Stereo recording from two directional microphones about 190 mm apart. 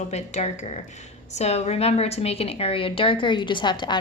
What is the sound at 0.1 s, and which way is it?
A woman's voice, 35° left (ahead or behind).